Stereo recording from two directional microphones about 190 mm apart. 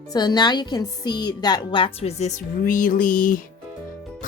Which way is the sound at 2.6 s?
45° left (ahead or behind).